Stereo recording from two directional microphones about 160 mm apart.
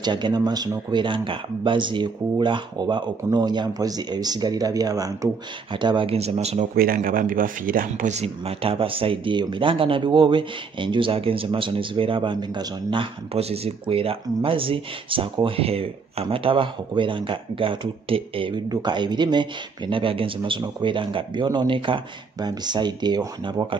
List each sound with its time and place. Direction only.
0.0 s speech: 25° right (ahead or behind)
6.7 s speech: 65° right (ahead or behind); by 23.8 s 30° right (ahead or behind)